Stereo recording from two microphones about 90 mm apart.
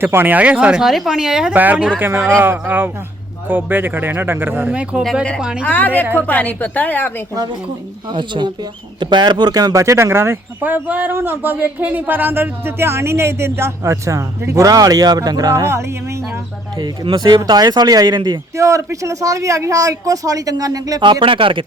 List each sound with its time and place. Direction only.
0.0 s speech: 25° right (ahead or behind); by 1.5 s 5° right (ahead or behind)
1.5 s speech: 20° right (ahead or behind)
4.7 s speech: 15° right (ahead or behind)
5.6 s a woman's voice: 20° left (ahead or behind)
8.1 s speech: 60° right (ahead or behind); by 15.8 s 35° right (ahead or behind)
16.7 s speech: 50° right (ahead or behind)
17.1 s speech: 65° right (ahead or behind)
18.5 s speech: 35° right (ahead or behind)
21.0 s speech: 70° right (ahead or behind)